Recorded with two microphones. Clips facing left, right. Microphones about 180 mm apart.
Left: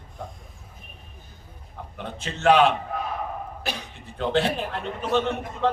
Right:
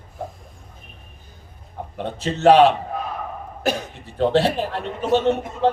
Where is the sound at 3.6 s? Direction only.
45° right (ahead or behind).